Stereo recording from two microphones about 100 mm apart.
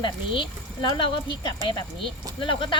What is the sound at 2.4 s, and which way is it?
Speech, 55° left (ahead or behind).